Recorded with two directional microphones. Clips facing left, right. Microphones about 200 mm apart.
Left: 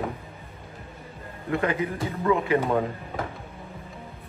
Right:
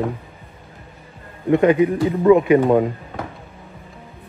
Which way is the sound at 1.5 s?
20° right (ahead or behind).